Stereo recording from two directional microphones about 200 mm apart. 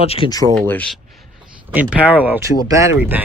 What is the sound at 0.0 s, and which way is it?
Speech, 30° left (ahead or behind).